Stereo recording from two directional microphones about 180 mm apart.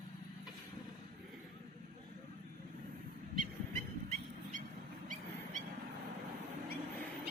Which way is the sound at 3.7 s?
40° right (ahead or behind).